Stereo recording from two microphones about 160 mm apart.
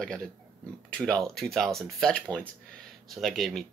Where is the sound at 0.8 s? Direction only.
5° left (ahead or behind).